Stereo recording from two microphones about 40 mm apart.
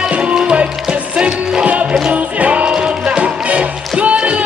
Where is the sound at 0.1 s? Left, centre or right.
Right.